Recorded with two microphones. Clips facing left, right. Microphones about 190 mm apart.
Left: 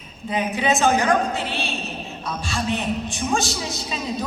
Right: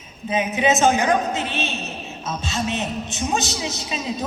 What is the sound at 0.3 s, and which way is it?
Speech, 20° right (ahead or behind).